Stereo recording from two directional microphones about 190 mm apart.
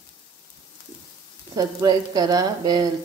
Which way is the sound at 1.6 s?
20° right (ahead or behind).